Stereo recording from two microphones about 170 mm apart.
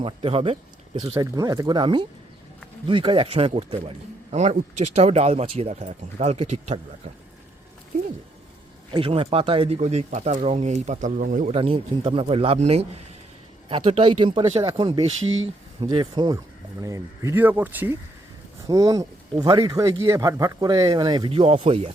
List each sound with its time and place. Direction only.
0.0 s speech: 35° right (ahead or behind)
1.1 s speech: 20° right (ahead or behind); by 6.7 s 40° right (ahead or behind)
8.9 s speech: 30° right (ahead or behind); by 11.5 s 50° right (ahead or behind)
11.5 s speech: 30° right (ahead or behind); by 17.9 s 10° right (ahead or behind)
18.7 s speech: 20° right (ahead or behind); by 21.9 s 35° right (ahead or behind)